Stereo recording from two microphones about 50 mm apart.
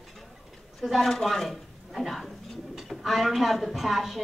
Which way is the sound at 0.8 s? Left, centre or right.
Centre.